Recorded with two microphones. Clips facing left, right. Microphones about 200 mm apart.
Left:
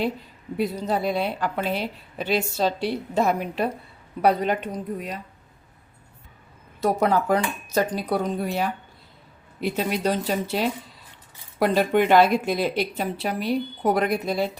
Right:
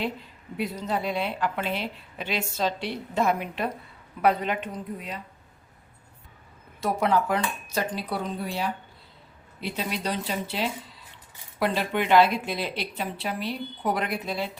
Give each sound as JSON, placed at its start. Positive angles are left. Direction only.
{"t": 0.5, "sound": "a woman's voice", "side_deg": 40}
{"t": 6.8, "sound": "a woman's voice", "side_deg": 40}